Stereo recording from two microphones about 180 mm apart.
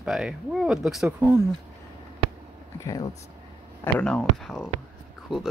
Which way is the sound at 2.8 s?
20° left (ahead or behind).